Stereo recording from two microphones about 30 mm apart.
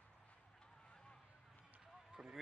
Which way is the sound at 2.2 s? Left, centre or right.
Centre.